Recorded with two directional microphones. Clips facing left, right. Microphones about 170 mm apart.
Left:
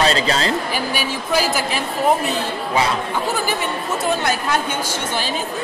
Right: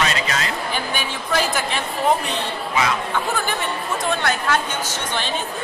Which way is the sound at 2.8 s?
30° left (ahead or behind).